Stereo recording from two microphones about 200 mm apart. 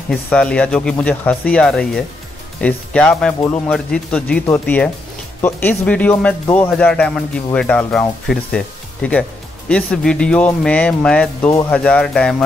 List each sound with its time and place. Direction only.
0.1 s speech: 5° left (ahead or behind)